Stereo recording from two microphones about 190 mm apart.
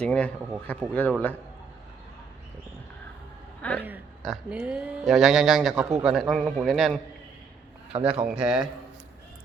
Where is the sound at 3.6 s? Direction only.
5° left (ahead or behind).